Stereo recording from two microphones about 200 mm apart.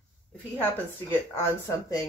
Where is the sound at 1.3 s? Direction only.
15° left (ahead or behind).